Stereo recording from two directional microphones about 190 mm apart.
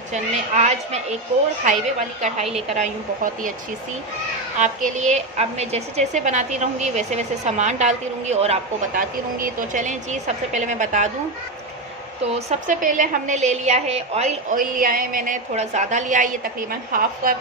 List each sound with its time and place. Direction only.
0.1 s a woman's voice: 35° right (ahead or behind)
4.6 s a woman's voice: 40° right (ahead or behind)
12.4 s a woman's voice: 45° right (ahead or behind)